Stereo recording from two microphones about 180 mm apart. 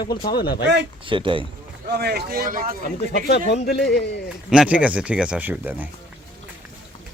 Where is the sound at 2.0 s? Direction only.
60° right (ahead or behind).